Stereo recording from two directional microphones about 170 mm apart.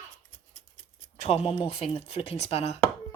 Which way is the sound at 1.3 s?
35° left (ahead or behind).